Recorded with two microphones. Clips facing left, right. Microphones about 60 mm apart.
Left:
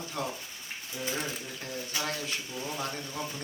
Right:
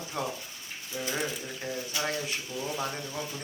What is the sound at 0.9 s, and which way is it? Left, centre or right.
Speech, right.